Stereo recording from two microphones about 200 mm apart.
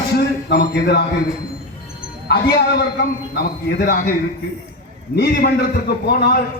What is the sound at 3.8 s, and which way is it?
Speech, 45° left (ahead or behind).